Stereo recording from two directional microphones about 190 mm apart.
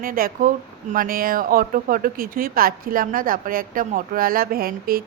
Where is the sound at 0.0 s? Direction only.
50° right (ahead or behind).